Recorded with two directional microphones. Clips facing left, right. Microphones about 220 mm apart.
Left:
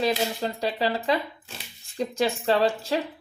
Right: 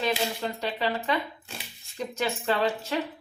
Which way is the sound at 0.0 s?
35° left (ahead or behind).